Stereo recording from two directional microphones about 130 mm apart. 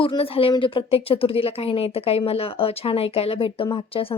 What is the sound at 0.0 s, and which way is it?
Speech, 45° left (ahead or behind).